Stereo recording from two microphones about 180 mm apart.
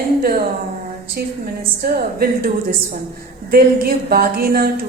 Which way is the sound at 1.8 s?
60° right (ahead or behind).